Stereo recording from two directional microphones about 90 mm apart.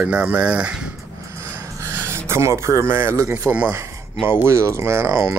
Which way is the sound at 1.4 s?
30° right (ahead or behind).